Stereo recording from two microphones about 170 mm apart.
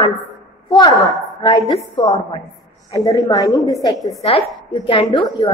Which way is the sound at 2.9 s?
20° left (ahead or behind).